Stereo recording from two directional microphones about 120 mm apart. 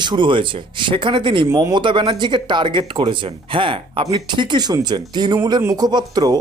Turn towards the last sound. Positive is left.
turn(degrees=-35)  # may be behind; listen again after turning